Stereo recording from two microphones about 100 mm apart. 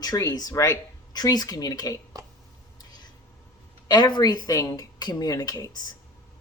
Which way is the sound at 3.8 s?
45° left (ahead or behind).